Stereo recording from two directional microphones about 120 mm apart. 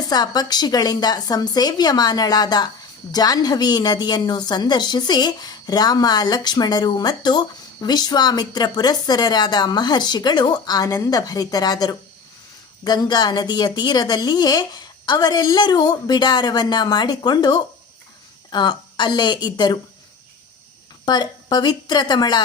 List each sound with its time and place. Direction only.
0.1 s a woman's voice: 35° left (ahead or behind)
21.0 s a woman's voice: 35° left (ahead or behind)